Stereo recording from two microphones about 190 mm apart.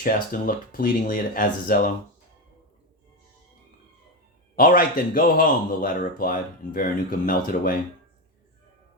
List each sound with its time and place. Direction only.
0.0 s speech: 45° left (ahead or behind)
4.5 s speech: 50° left (ahead or behind)